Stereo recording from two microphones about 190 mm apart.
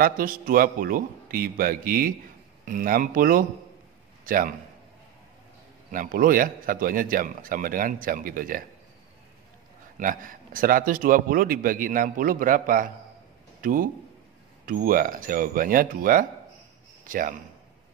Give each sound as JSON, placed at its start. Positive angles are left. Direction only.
{"t": 0.0, "sound": "a man's voice", "side_deg": -50}
{"t": 5.9, "sound": "a man's voice", "side_deg": -45}
{"t": 9.9, "sound": "a man's voice", "side_deg": -45}